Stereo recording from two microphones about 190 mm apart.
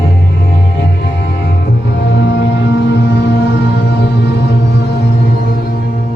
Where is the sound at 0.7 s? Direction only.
50° left (ahead or behind).